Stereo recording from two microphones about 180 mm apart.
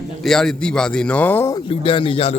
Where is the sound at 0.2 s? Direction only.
Centre (ahead or behind).